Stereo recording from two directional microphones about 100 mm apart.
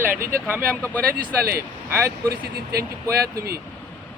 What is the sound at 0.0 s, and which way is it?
Speech, 25° right (ahead or behind).